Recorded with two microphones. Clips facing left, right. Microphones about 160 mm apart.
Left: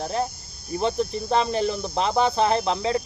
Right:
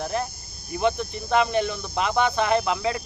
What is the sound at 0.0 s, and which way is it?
Speech, 30° left (ahead or behind).